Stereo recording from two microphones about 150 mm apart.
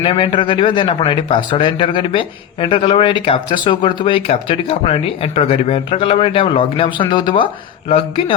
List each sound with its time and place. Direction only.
0.0 s speech: 35° left (ahead or behind)